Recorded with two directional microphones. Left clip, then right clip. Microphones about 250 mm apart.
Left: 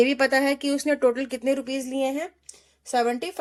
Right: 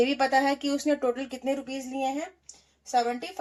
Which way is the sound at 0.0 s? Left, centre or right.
Left.